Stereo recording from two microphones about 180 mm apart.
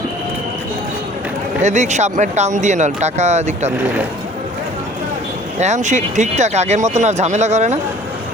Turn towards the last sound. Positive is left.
turn(degrees=-40)  # may be behind; listen again after turning